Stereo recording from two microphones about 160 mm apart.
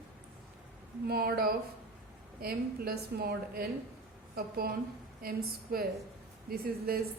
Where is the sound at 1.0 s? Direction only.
75° right (ahead or behind).